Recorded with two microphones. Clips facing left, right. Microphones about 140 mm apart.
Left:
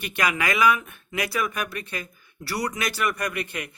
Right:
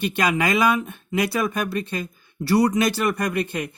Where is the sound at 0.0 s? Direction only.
25° right (ahead or behind).